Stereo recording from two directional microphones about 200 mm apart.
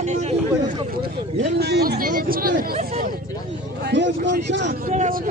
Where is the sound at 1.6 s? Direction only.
55° right (ahead or behind).